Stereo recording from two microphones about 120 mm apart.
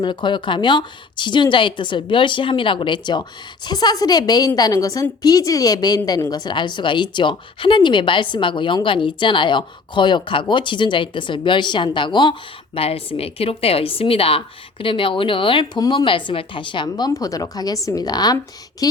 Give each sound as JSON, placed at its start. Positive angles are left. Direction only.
{"t": 0.0, "sound": "a woman's voice", "side_deg": 40}